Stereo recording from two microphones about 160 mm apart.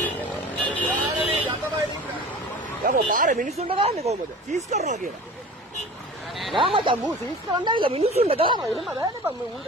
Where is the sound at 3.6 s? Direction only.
35° right (ahead or behind).